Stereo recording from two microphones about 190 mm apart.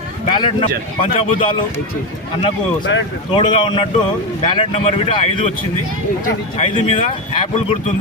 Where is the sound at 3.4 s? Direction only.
25° left (ahead or behind).